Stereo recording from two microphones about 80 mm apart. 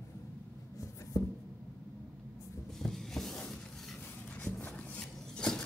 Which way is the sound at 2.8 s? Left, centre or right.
Centre.